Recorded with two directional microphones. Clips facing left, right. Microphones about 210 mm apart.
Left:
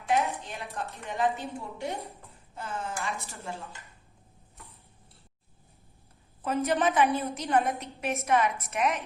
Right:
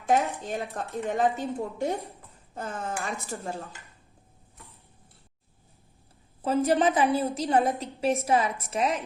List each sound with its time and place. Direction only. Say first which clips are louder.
0.1 s speech: right 3 dB; 45° right (ahead or behind)
4.5 s tick-tock: even; centre (ahead or behind)
6.4 s a woman's voice: right 4 dB; 30° right (ahead or behind)